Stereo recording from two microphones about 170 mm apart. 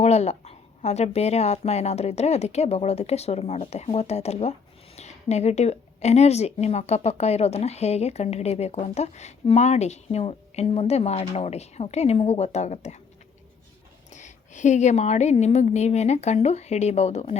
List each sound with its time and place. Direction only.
0.0 s speech: 40° left (ahead or behind)
14.1 s speech: 45° left (ahead or behind)